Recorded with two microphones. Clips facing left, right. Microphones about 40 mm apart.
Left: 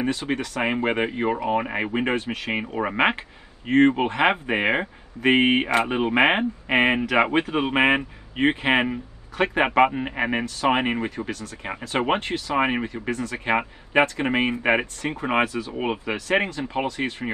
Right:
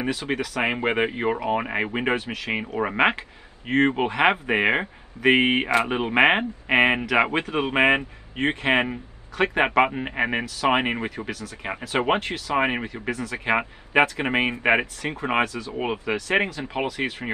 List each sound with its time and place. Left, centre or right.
0.0 s speech: centre
9.4 s speech: centre
15.4 s speech: left
15.7 s speech: centre